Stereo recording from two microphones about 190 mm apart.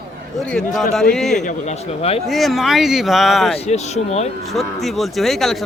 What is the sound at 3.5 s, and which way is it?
Speech, 35° left (ahead or behind).